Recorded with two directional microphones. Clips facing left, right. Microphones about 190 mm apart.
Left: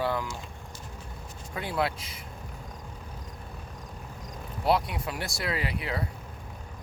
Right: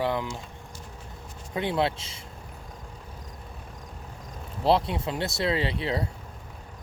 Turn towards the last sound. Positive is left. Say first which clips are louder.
# right 4 dB
turn(degrees=-25)  # may be behind; listen again after turning